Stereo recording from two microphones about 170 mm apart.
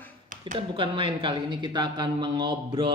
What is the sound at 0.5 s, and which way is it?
Speech, 30° right (ahead or behind).